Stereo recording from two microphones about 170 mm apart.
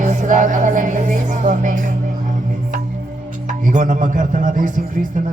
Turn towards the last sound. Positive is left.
turn(degrees=-50)  # may be behind; listen again after turning